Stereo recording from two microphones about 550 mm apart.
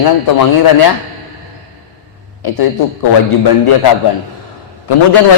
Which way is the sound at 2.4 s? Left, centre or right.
Left.